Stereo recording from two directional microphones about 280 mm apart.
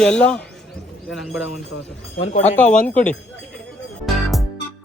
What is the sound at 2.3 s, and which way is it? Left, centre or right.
Speech, left.